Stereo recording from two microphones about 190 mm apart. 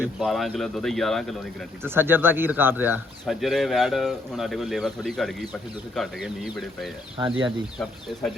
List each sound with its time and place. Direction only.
0.0 s speech: centre (ahead or behind)
1.8 s speech: 10° right (ahead or behind)
7.2 s speech: 25° right (ahead or behind)